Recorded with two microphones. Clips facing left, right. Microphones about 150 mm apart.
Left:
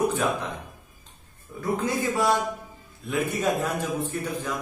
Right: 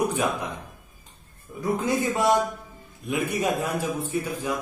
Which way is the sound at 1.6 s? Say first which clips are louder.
Right 1 dB; 20° right (ahead or behind).